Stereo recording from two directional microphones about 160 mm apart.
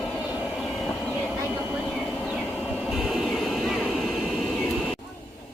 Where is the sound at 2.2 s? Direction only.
Centre (ahead or behind).